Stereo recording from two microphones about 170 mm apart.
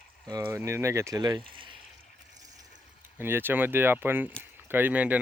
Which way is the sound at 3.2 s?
15° right (ahead or behind).